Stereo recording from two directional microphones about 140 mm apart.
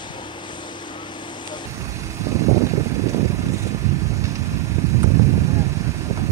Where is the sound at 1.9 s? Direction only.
20° right (ahead or behind).